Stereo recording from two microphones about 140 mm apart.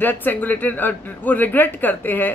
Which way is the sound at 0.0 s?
15° left (ahead or behind).